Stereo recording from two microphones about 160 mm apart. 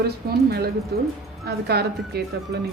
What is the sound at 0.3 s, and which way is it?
Speech, 80° right.